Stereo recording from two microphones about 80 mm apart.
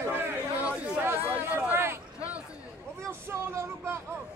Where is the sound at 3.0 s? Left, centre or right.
Right.